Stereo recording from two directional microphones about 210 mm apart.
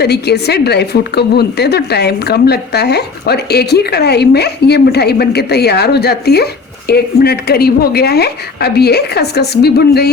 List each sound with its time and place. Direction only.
0.0 s a woman's voice: 50° left (ahead or behind)